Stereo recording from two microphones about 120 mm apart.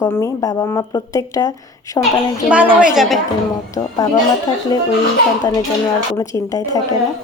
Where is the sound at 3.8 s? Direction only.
30° left (ahead or behind).